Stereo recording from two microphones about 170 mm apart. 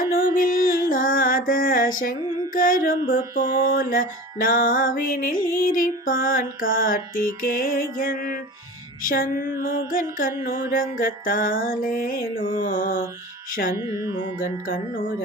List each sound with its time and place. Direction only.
0.3 s music: 55° left (ahead or behind)
12.6 s mantra: 55° left (ahead or behind)
13.5 s music: 55° left (ahead or behind)
13.7 s music: 20° right (ahead or behind)
14.3 s music: 55° left (ahead or behind)